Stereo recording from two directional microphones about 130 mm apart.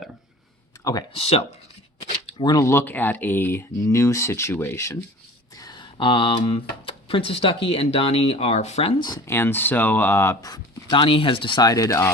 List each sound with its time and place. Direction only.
1.1 s speech: 50° left (ahead or behind)
2.4 s speech: 30° left (ahead or behind)
5.5 s speech: 30° left (ahead or behind); by 9.0 s 55° left (ahead or behind)
9.0 s speech: 30° left (ahead or behind)
9.3 s speech: 15° left (ahead or behind)